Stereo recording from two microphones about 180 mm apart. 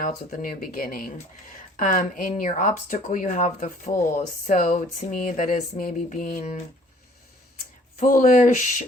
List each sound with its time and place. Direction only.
0.0 s speech: 50° left (ahead or behind)
7.9 s speech: 45° left (ahead or behind)